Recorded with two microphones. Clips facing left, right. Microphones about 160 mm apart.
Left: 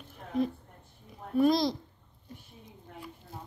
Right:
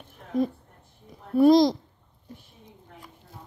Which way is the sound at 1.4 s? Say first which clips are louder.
Right 8 dB; 40° right (ahead or behind).